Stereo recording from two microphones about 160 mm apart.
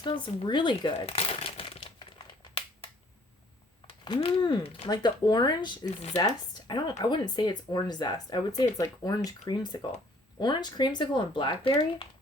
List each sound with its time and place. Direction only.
0.0 s crumpling: 30° left (ahead or behind)
3.8 s speech: 30° left (ahead or behind)